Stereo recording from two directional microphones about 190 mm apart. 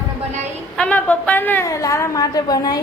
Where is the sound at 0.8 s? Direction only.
5° left (ahead or behind).